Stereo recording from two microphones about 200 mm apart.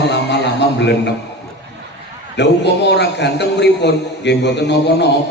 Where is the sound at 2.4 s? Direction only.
60° left (ahead or behind).